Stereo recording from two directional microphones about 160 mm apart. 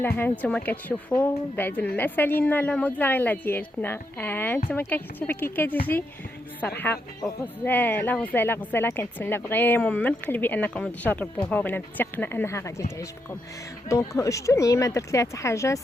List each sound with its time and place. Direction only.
0.0 s speech: 10° left (ahead or behind)
14.2 s speech: 20° left (ahead or behind)